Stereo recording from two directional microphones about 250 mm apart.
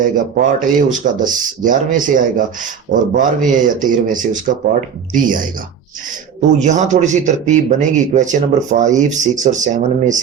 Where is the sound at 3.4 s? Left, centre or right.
Right.